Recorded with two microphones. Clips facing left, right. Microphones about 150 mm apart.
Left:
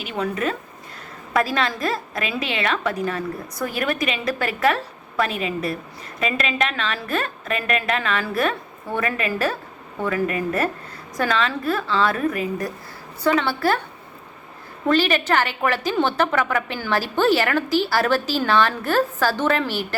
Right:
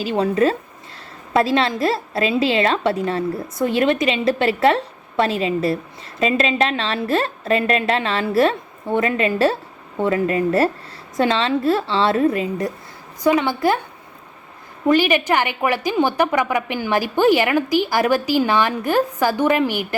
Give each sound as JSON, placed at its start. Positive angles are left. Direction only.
{"t": 0.0, "sound": "a woman's voice", "side_deg": -30}
{"t": 14.8, "sound": "a woman's voice", "side_deg": -15}